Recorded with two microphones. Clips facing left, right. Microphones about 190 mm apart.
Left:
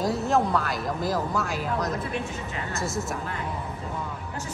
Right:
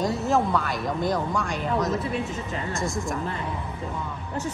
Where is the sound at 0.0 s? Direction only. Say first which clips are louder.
Even; centre (ahead or behind).